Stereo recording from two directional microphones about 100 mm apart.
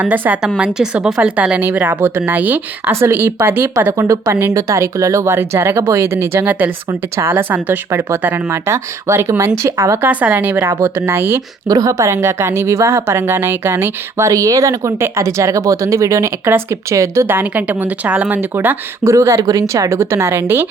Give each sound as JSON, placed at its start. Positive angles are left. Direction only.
{"t": 0.0, "sound": "a woman's voice", "side_deg": -15}
{"t": 10.1, "sound": "a woman's voice", "side_deg": -15}
{"t": 11.7, "sound": "a woman's voice", "side_deg": -35}